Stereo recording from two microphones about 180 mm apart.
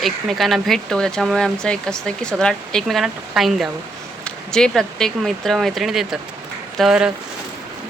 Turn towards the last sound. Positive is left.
turn(degrees=-5)  # may be behind; listen again after turning